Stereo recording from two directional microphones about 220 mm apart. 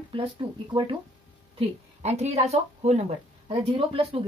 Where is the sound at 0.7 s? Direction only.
20° right (ahead or behind).